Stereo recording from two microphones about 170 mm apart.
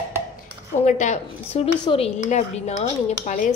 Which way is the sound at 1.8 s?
35° left (ahead or behind).